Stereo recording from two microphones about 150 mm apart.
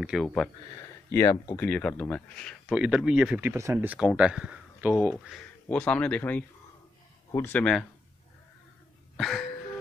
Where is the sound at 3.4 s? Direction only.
20° right (ahead or behind).